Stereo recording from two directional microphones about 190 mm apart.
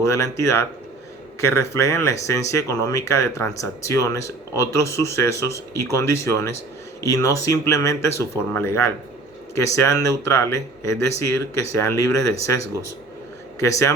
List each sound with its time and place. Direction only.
0.0 s speech: 15° left (ahead or behind)